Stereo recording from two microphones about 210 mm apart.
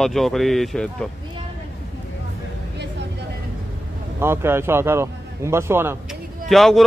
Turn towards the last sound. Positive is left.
turn(degrees=0)  # may be behind; listen again after turning